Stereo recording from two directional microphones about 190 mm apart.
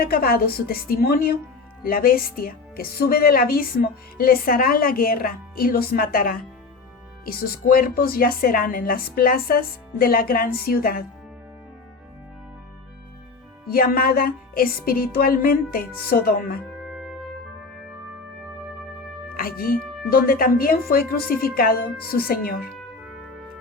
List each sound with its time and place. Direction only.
0.0 s a woman's voice: 50° left (ahead or behind)
13.7 s a woman's voice: 50° left (ahead or behind)
16.6 s music: centre (ahead or behind)
19.3 s music: 50° left (ahead or behind)
19.7 s music: centre (ahead or behind)
20.1 s a woman's voice: 50° left (ahead or behind)